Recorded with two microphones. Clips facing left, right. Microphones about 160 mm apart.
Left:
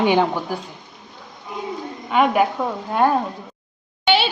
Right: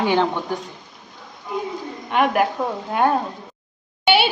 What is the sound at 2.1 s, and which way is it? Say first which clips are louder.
A woman's voice: left 1 dB; centre (ahead or behind).